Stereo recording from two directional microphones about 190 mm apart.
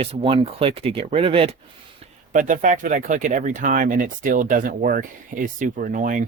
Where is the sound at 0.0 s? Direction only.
30° right (ahead or behind).